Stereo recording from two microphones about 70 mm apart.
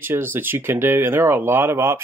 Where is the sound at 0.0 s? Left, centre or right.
Right.